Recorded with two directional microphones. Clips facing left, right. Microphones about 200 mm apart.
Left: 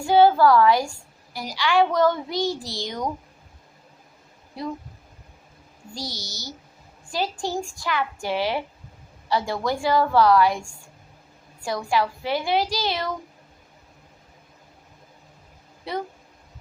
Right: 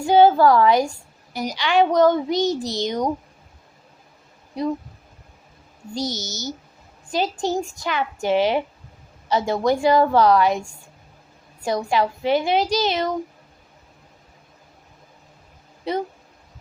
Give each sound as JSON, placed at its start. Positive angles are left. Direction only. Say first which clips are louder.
{"t": 0.0, "sound": "a woman's voice", "louder": "right 2 dB", "side_deg": -20}
{"t": 4.6, "sound": "a woman's voice", "louder": "right 7 dB", "side_deg": -20}
{"t": 5.9, "sound": "a woman's voice", "louder": "right 8 dB", "side_deg": -20}
{"t": 15.9, "sound": "a woman's voice", "louder": "right 5 dB", "side_deg": -20}